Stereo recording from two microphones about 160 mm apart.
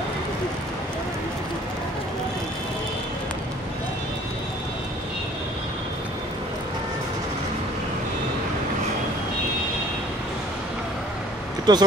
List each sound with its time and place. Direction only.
11.7 s speech: 25° right (ahead or behind)